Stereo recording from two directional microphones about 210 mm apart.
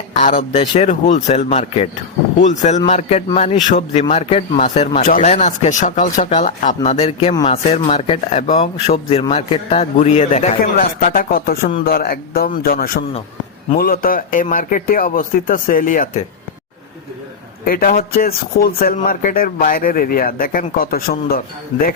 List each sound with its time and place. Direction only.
0.2 s speech: 35° left (ahead or behind)
17.7 s speech: 45° left (ahead or behind)